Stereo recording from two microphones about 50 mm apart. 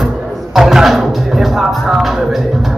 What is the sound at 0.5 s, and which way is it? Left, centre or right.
Music, centre.